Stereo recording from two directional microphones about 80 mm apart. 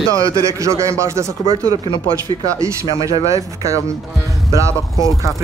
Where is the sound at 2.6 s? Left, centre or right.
Right.